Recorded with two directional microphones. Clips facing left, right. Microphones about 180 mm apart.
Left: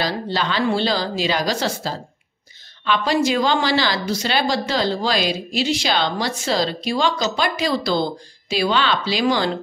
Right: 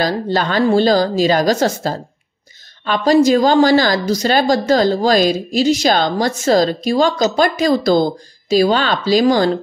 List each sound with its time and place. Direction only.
0.0 s a woman's voice: 45° right (ahead or behind)